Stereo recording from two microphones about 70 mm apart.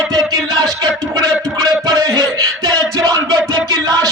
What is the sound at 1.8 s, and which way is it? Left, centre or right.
Music, right.